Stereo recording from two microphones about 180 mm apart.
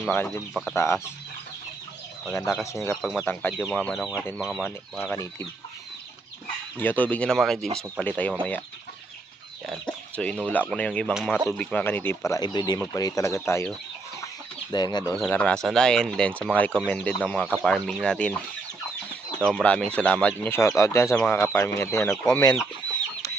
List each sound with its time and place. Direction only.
0.1 s speech: 10° left (ahead or behind)
2.5 s speech: centre (ahead or behind)
6.7 s speech: 10° left (ahead or behind)
9.6 s speech: 5° left (ahead or behind)
14.7 s speech: 25° left (ahead or behind)
15.3 s speech: 5° left (ahead or behind)
19.5 s speech: 5° left (ahead or behind)